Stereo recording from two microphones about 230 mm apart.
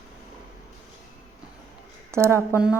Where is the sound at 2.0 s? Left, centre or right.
Centre.